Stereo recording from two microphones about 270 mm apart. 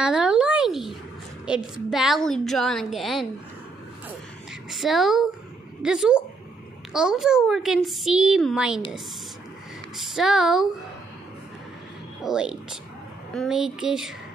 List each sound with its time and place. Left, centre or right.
0.0 s a sound: centre
1.5 s a woman's voice: centre
4.6 s a child's voice: centre
9.9 s a child's voice: centre
12.2 s a child's voice: centre